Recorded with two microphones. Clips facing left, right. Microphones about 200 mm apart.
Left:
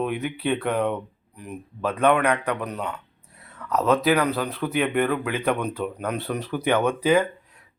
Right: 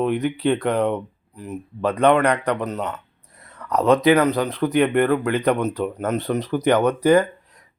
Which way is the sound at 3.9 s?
5° left (ahead or behind).